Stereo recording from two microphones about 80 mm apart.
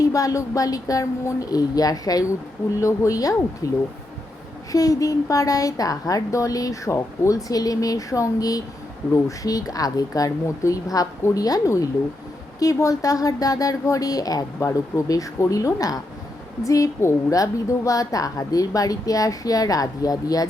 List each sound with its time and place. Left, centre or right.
0.0 s a woman's voice: left